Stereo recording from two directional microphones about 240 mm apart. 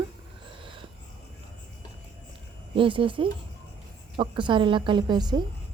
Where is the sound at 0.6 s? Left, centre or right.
Right.